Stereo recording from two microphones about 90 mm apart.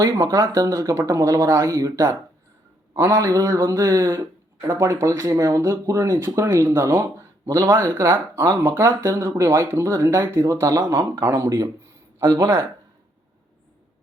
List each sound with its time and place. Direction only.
0.0 s speech: 35° right (ahead or behind)